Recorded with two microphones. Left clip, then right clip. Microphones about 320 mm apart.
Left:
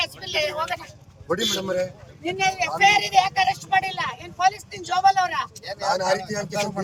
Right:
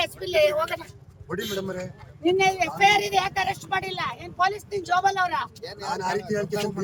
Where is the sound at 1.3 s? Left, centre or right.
Centre.